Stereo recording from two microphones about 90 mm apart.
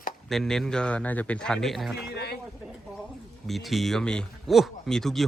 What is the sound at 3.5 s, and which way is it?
Speech, centre (ahead or behind).